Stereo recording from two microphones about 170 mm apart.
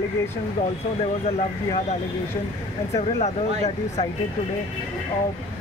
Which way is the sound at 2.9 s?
40° left (ahead or behind).